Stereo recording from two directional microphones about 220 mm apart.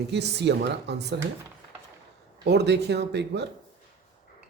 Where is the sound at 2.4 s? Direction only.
50° right (ahead or behind).